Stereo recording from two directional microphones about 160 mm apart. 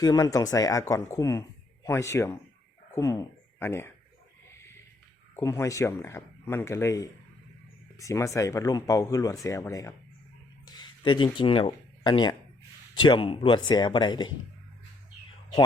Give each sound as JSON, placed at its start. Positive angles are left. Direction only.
{"t": 0.0, "sound": "speech", "side_deg": 25}
{"t": 4.5, "sound": "a sound", "side_deg": 15}
{"t": 5.4, "sound": "speech", "side_deg": 20}